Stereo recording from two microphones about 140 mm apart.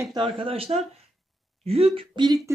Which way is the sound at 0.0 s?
30° right (ahead or behind).